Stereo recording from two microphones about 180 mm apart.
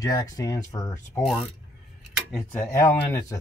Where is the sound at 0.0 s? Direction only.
20° left (ahead or behind).